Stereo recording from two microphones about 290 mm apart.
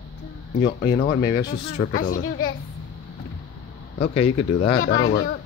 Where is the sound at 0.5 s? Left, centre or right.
Left.